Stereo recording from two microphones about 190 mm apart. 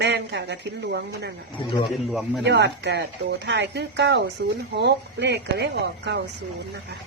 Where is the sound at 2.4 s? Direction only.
65° right (ahead or behind).